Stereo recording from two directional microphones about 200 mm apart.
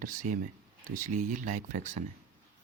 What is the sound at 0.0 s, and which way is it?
Speech, 40° right (ahead or behind).